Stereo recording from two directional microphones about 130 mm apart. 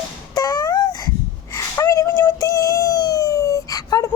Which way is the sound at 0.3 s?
30° left (ahead or behind).